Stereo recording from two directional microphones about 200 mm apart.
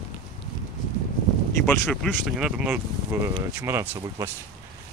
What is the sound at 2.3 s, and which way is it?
Speech, 5° right (ahead or behind).